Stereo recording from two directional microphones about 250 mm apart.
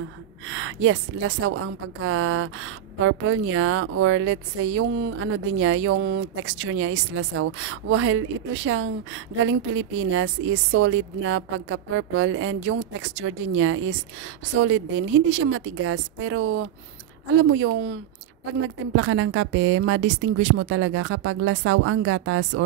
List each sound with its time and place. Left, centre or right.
0.5 s a woman's voice: right